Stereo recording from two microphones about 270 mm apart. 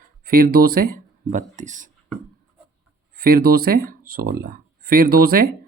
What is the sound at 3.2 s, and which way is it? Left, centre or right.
Speech, right.